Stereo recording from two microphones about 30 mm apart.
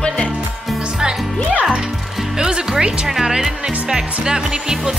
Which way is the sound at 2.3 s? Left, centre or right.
Right.